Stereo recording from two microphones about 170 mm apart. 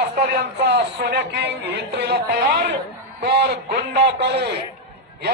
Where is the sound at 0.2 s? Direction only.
80° right.